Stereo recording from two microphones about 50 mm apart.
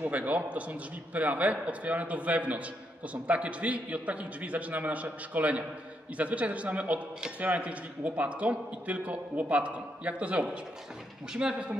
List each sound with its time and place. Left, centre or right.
0.0 s a man's voice: right